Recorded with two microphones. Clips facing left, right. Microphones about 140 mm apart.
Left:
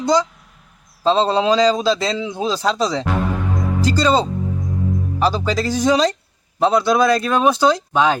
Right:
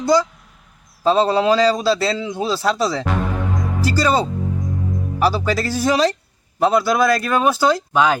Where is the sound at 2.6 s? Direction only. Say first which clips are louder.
Even; 5° right (ahead or behind).